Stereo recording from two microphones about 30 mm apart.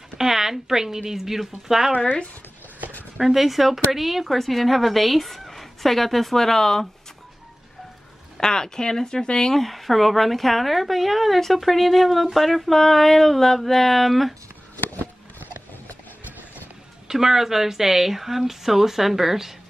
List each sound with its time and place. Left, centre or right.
0.2 s speech: centre
3.3 s speech: centre
8.4 s speech: left
9.5 s speech: centre
12.4 s a sound: centre
14.8 s a sound: left
17.1 s speech: centre